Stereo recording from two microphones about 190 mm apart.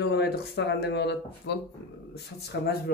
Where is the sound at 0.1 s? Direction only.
60° left (ahead or behind).